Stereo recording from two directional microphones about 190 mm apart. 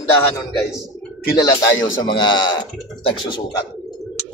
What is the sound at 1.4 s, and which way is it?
A man's voice, 20° left (ahead or behind).